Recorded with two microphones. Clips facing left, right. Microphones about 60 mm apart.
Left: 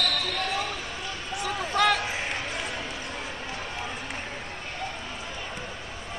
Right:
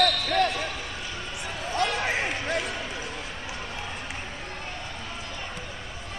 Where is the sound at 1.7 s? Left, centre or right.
Left.